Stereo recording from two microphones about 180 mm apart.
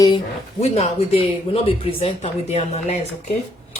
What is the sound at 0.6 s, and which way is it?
Speech, 35° left (ahead or behind).